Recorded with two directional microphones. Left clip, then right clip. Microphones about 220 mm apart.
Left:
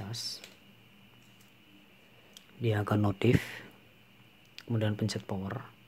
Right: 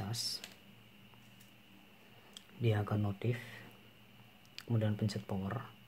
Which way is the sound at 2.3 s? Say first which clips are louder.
Left 4 dB; 5° left (ahead or behind).